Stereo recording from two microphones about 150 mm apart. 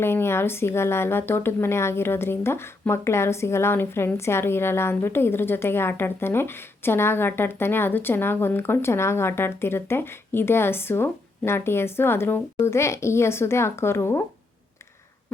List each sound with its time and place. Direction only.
0.0 s speech: 15° left (ahead or behind)